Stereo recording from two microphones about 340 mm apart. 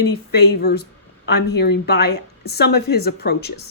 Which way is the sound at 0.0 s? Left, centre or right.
Left.